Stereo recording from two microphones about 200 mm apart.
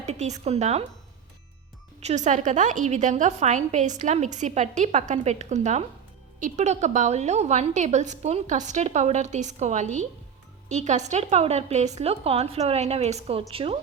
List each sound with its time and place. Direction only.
0.0 s a woman's voice: 35° right (ahead or behind)
2.0 s a woman's voice: 35° right (ahead or behind)